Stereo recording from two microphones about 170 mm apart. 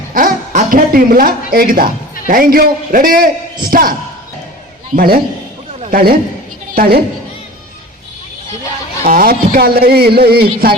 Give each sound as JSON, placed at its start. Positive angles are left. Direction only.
{"t": 0.1, "sound": "a man's voice", "side_deg": -55}
{"t": 4.9, "sound": "a man's voice", "side_deg": -60}
{"t": 9.0, "sound": "a man's voice", "side_deg": -55}